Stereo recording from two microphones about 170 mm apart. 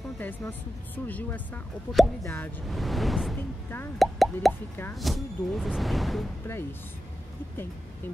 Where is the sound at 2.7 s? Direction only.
Centre (ahead or behind).